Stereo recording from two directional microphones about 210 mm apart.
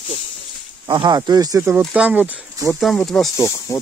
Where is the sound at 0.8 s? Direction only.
20° right (ahead or behind); by 3.3 s centre (ahead or behind).